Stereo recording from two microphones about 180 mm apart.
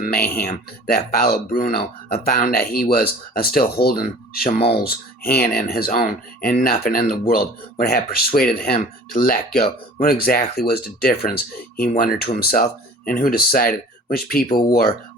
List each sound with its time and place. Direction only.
0.1 s speech: 10° left (ahead or behind)
0.4 s speech: 55° left (ahead or behind)